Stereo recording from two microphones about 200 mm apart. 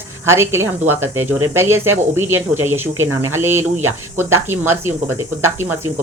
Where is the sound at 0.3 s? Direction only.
10° right (ahead or behind).